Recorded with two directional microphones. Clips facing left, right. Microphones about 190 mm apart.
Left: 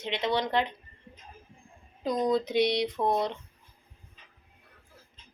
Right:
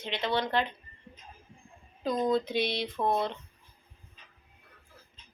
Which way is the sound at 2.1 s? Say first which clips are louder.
Left 1 dB; centre (ahead or behind).